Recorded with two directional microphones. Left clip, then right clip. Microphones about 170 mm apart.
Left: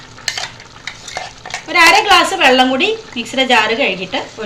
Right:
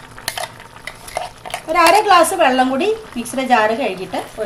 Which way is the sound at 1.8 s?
85° right.